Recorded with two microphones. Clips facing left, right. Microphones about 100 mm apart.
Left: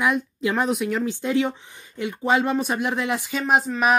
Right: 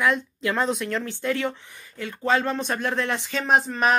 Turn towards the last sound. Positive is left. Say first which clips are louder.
# left 1 dB
turn(degrees=5)  # may be behind; listen again after turning